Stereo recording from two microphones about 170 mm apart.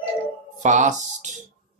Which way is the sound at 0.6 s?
45° right (ahead or behind).